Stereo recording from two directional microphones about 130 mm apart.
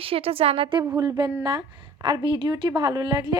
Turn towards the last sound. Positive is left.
turn(degrees=-30)  # may be behind; listen again after turning